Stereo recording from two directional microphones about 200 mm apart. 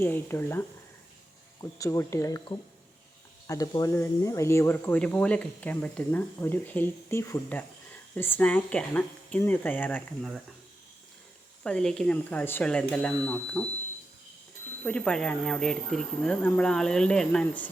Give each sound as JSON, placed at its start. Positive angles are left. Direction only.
{"t": 0.0, "sound": "speech", "side_deg": 10}
{"t": 1.8, "sound": "speech", "side_deg": 15}
{"t": 11.6, "sound": "speech", "side_deg": 5}
{"t": 14.8, "sound": "speech", "side_deg": 5}